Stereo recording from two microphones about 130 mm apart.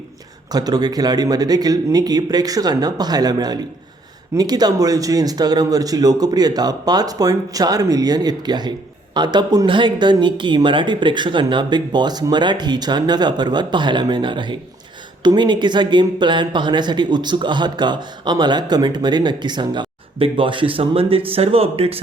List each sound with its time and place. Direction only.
0.5 s speech: 30° right (ahead or behind); by 22.0 s 50° right (ahead or behind)